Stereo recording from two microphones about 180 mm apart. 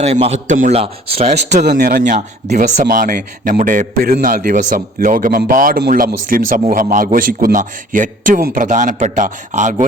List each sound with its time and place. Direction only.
0.0 s speech: 35° right (ahead or behind)
1.8 s a man's voice: 55° right (ahead or behind)